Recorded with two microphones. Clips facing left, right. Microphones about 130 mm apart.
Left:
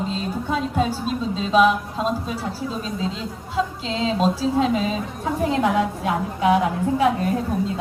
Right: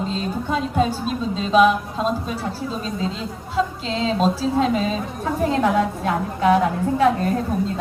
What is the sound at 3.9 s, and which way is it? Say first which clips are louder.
A woman's voice: even; 15° left (ahead or behind).